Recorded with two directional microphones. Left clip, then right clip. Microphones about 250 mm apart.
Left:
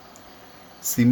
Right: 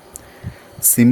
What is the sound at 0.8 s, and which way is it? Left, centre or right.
Speech, right.